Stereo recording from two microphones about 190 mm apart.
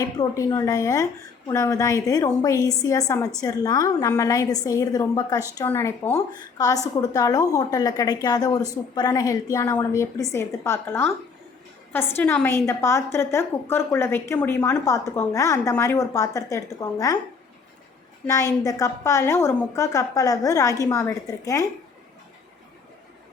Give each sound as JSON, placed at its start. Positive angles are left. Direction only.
{"t": 0.0, "sound": "a woman's voice", "side_deg": 20}
{"t": 18.3, "sound": "a woman's voice", "side_deg": 15}